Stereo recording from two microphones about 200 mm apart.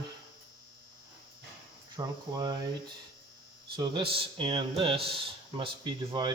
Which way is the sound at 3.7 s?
25° right (ahead or behind).